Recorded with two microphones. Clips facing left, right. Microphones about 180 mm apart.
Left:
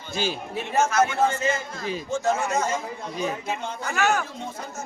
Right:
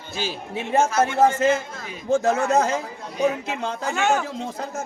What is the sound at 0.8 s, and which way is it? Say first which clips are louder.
Speech: right 1 dB; 30° right (ahead or behind).